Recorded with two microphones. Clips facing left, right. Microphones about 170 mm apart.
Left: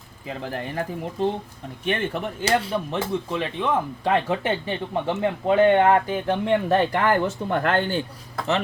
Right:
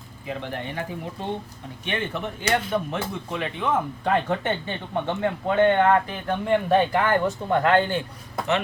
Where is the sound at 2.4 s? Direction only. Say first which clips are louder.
Left 1 dB; 30° left (ahead or behind).